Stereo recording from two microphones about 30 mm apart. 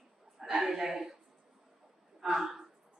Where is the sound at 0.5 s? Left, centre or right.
Centre.